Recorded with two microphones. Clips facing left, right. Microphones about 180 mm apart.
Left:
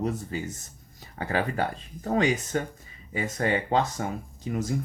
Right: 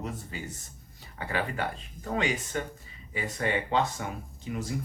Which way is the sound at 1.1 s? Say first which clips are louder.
Left 4 dB; 40° left (ahead or behind).